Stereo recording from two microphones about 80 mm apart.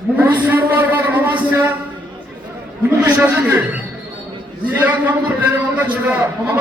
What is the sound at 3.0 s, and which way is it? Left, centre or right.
Speech, right.